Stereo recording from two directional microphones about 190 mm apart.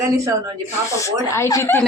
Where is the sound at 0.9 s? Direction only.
15° left (ahead or behind).